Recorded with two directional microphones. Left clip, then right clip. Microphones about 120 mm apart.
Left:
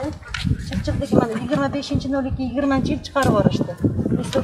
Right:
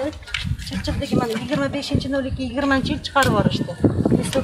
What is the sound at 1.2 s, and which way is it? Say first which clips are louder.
Speech: left 1 dB; 15° right (ahead or behind).